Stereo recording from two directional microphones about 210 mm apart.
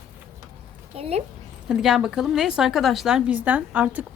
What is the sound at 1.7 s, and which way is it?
A woman's voice, centre (ahead or behind).